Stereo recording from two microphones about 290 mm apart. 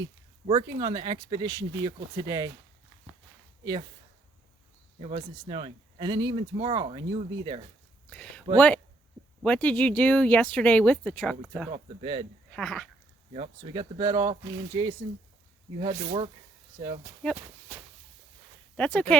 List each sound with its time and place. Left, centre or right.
0.4 s speech: centre
4.9 s speech: right
8.1 s speech: centre
11.7 s speech: centre
12.5 s speech: centre
13.3 s speech: centre
17.3 s walk: centre
18.8 s speech: centre